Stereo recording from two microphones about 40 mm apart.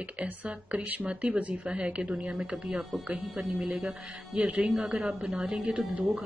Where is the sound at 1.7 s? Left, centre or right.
Right.